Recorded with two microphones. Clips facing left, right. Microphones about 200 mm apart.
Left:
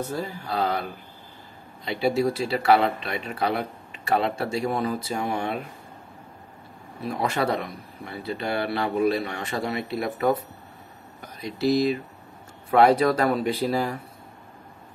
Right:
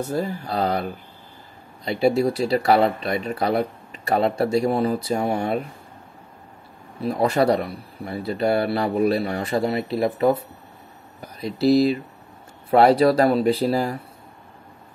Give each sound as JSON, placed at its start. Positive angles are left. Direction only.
{"t": 0.1, "sound": "speech", "side_deg": -40}
{"t": 1.9, "sound": "speech", "side_deg": -40}
{"t": 7.0, "sound": "speech", "side_deg": -35}